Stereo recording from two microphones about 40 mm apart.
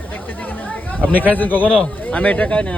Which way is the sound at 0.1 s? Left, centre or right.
Left.